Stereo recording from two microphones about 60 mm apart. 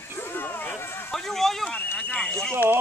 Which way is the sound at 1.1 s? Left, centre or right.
Centre.